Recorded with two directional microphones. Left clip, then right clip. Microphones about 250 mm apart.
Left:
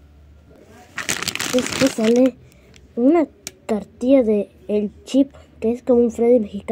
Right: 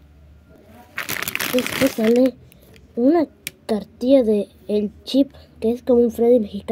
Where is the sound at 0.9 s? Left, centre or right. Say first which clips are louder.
Left 1 dB; centre.